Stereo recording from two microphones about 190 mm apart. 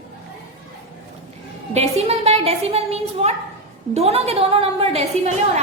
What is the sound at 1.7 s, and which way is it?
A woman's voice, 35° right (ahead or behind).